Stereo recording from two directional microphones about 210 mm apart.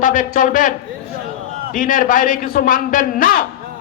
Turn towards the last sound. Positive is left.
turn(degrees=40)  # may be behind; listen again after turning